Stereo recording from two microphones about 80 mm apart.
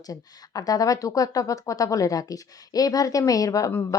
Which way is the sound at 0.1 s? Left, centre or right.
Left.